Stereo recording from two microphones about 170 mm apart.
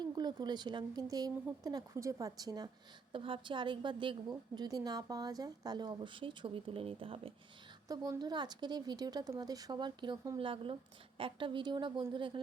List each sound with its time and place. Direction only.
0.0 s a woman's voice: 25° right (ahead or behind)
7.9 s a woman's voice: 20° right (ahead or behind)